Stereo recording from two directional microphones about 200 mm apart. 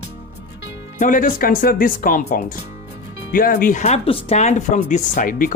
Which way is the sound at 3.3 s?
45° left (ahead or behind).